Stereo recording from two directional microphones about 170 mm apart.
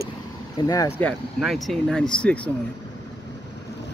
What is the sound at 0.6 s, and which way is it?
Speech, 20° left (ahead or behind).